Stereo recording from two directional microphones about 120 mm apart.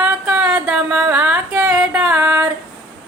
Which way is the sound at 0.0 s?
10° right (ahead or behind).